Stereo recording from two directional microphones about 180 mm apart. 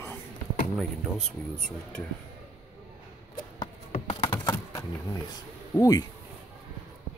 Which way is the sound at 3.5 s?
35° left (ahead or behind).